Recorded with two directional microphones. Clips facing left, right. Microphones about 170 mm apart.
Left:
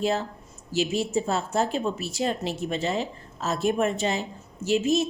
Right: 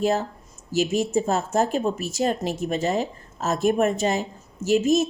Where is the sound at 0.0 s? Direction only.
45° right (ahead or behind).